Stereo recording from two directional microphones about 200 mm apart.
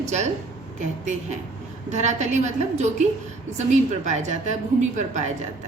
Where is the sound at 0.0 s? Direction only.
35° right (ahead or behind).